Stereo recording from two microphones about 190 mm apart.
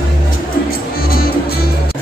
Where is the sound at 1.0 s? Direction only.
50° left (ahead or behind).